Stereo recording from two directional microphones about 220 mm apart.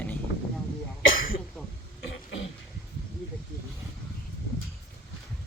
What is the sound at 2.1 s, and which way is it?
Throat clearing, 60° left (ahead or behind).